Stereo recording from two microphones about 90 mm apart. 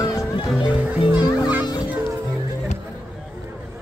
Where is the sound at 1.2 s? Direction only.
50° left (ahead or behind).